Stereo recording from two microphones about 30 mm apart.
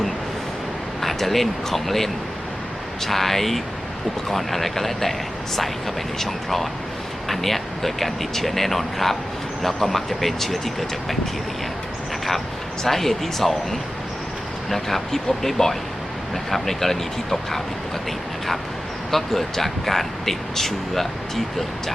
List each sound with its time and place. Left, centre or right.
1.0 s speech: centre
6.1 s speech: centre
12.8 s speech: centre
19.1 s speech: centre